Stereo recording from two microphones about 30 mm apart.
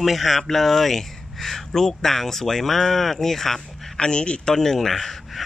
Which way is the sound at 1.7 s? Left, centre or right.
Centre.